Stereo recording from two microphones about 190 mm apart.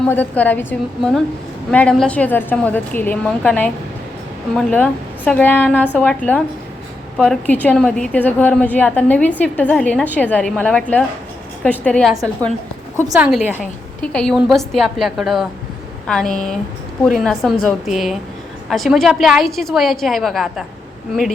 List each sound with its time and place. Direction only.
0.0 s a woman's voice: 10° left (ahead or behind)
12.1 s a woman's voice: 20° right (ahead or behind)
13.1 s a woman's voice: 10° right (ahead or behind)
14.0 s a woman's voice: 5° left (ahead or behind)